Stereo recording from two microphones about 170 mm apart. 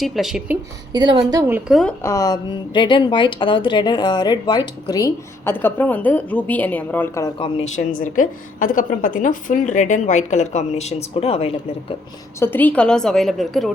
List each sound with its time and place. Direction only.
0.0 s a woman's voice: centre (ahead or behind)
0.9 s a woman's voice: 30° right (ahead or behind)
1.3 s a woman's voice: 15° right (ahead or behind)
2.0 s a woman's voice: 15° left (ahead or behind)
7.3 s a woman's voice: 35° left (ahead or behind)
7.9 s a woman's voice: 50° left (ahead or behind); by 11.5 s 35° left (ahead or behind)
12.4 s a woman's voice: 10° left (ahead or behind)